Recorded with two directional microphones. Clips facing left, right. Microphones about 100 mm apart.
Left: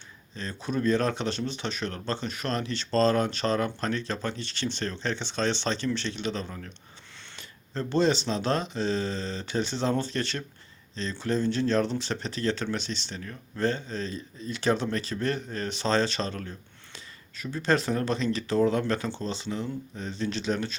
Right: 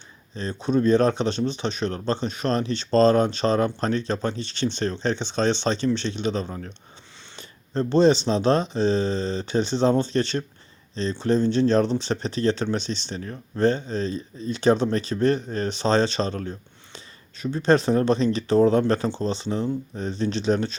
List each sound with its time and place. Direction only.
0.3 s speech: 25° right (ahead or behind)